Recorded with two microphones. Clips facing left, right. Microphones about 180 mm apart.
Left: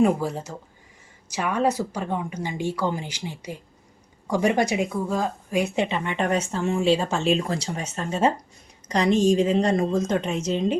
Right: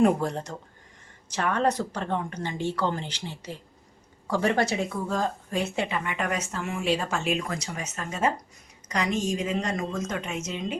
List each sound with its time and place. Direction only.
0.0 s a woman's voice: 5° left (ahead or behind); by 10.8 s 35° left (ahead or behind)